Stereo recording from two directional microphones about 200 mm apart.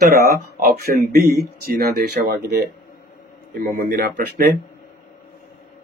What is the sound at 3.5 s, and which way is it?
Speech, 45° right (ahead or behind).